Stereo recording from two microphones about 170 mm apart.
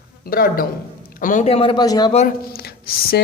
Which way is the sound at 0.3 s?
60° left (ahead or behind).